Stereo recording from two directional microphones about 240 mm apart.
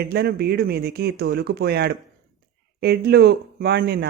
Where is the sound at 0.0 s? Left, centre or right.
Right.